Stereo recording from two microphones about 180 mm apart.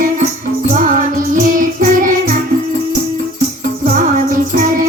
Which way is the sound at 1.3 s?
50° right (ahead or behind).